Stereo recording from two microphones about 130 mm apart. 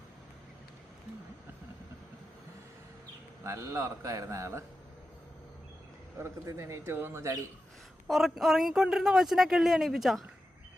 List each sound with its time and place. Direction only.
3.4 s a man's voice: 25° right (ahead or behind)
6.1 s a man's voice: 20° right (ahead or behind)
8.0 s speech: centre (ahead or behind)